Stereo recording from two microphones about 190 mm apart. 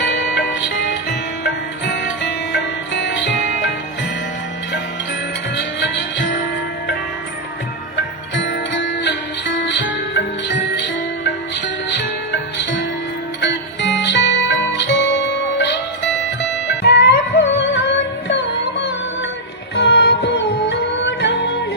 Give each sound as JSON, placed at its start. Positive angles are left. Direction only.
{"t": 0.3, "sound": "music", "side_deg": 70}
{"t": 5.5, "sound": "music", "side_deg": 65}
{"t": 8.4, "sound": "music", "side_deg": 70}
{"t": 19.7, "sound": "music", "side_deg": 65}